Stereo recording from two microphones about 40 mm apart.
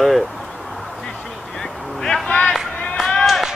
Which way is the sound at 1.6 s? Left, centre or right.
Centre.